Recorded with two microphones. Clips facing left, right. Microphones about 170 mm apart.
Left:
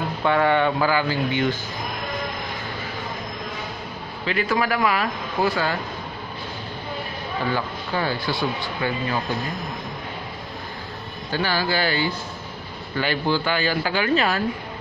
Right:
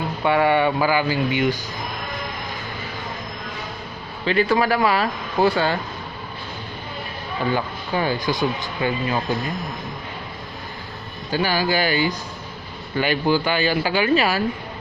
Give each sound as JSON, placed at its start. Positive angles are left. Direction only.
{"t": 0.2, "sound": "speech", "side_deg": -10}
{"t": 4.3, "sound": "a man's voice", "side_deg": -30}
{"t": 7.5, "sound": "speech", "side_deg": -15}
{"t": 11.3, "sound": "speech", "side_deg": -15}